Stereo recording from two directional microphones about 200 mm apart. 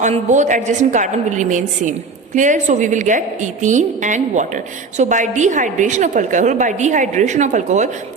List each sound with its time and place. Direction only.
0.0 s a woman's voice: 35° right (ahead or behind)